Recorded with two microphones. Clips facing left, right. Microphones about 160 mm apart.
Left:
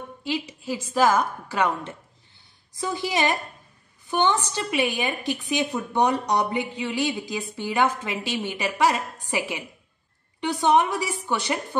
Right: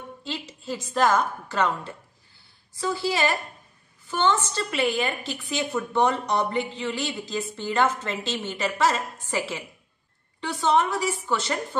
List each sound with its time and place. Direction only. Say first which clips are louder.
0.2 s a woman's voice: left 8 dB; 10° left (ahead or behind)